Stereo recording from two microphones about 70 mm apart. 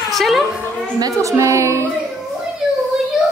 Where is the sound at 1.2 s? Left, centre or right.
Right.